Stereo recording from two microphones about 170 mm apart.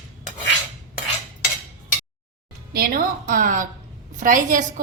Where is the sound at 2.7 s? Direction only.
65° right (ahead or behind).